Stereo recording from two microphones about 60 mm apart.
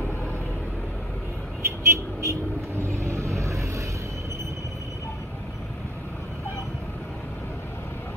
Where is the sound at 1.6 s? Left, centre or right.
Right.